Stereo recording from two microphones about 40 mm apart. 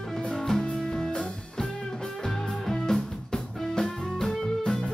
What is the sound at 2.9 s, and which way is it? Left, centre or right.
Music, centre.